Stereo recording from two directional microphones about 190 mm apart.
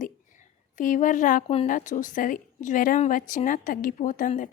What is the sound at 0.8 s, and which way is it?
A woman's voice, 45° left (ahead or behind).